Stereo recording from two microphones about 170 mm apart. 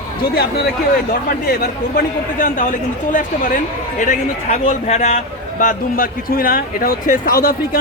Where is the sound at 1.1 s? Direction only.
60° left (ahead or behind).